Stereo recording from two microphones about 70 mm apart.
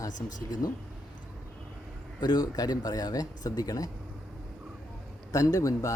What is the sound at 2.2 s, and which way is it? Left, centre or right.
Speech, left.